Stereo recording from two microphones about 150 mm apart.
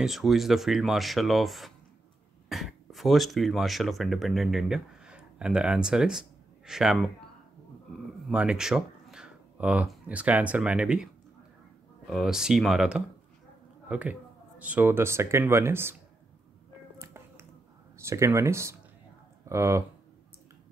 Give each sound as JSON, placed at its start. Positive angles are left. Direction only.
{"t": 0.0, "sound": "speech", "side_deg": 0}
{"t": 8.3, "sound": "speech", "side_deg": -5}
{"t": 12.1, "sound": "speech", "side_deg": 0}
{"t": 17.0, "sound": "music", "side_deg": -15}
{"t": 17.9, "sound": "speech", "side_deg": -20}